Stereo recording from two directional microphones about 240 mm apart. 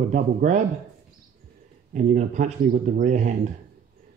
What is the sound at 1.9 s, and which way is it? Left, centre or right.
Speech, right.